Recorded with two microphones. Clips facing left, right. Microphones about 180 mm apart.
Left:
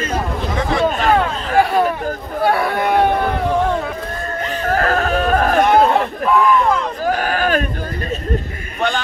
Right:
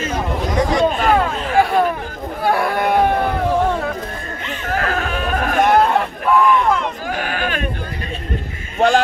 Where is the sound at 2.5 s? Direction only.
Centre (ahead or behind).